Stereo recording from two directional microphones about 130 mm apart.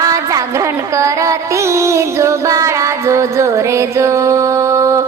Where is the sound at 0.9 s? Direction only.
25° right (ahead or behind).